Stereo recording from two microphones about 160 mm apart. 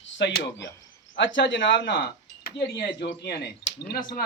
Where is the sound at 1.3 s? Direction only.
90° left.